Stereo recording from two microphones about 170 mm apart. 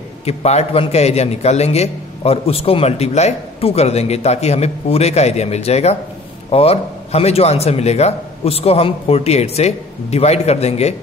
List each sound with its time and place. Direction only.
0.2 s a man's voice: 40° left (ahead or behind)